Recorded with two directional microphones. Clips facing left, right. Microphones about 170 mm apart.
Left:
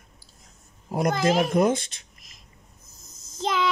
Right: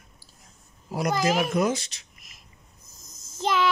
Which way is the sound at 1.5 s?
55° left (ahead or behind).